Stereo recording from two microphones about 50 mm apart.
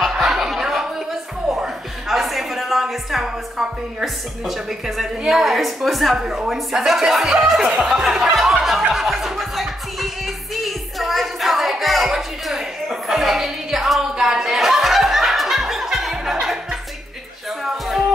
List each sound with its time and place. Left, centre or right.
0.0 s a sound: centre
2.0 s a woman's voice: centre
7.6 s speech: centre
8.9 s music: centre
14.1 s chuckle: centre